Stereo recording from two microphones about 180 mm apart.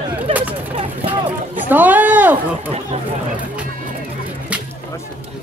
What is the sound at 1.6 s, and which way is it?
Speech, 10° right (ahead or behind).